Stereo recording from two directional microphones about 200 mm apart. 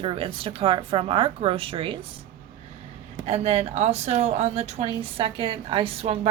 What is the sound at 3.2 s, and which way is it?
Speech, 30° right (ahead or behind).